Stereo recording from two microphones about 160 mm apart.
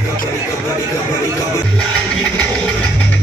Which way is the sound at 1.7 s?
5° left (ahead or behind).